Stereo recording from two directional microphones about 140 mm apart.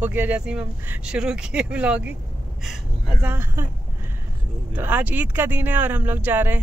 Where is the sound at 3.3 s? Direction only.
15° right (ahead or behind).